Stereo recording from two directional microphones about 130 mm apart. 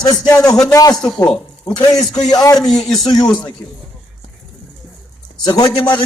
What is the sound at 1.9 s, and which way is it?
Speech, 5° left (ahead or behind).